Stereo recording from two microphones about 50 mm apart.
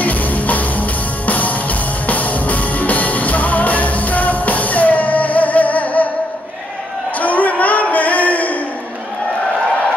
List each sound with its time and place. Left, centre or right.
0.0 s music: left
7.2 s music: left